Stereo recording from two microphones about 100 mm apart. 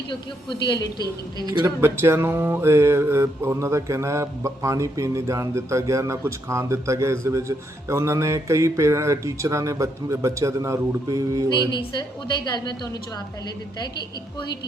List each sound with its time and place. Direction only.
0.7 s a woman's voice: 45° left (ahead or behind)
1.6 s music: 25° right (ahead or behind)
11.7 s a woman's voice: 50° left (ahead or behind)